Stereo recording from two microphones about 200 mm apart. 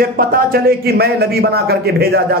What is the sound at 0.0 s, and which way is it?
A man's voice, 50° right (ahead or behind).